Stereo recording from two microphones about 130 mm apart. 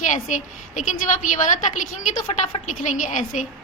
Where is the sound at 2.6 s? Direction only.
75° left (ahead or behind).